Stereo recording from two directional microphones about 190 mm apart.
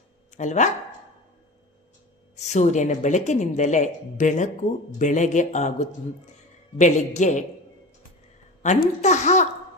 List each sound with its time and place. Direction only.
0.3 s speech: 40° left (ahead or behind)
2.4 s speech: 35° left (ahead or behind)
8.6 s speech: 40° left (ahead or behind)